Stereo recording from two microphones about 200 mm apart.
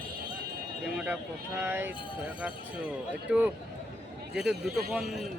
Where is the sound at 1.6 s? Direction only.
10° right (ahead or behind).